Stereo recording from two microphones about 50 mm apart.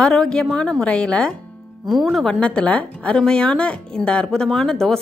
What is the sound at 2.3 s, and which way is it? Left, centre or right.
Speech, left.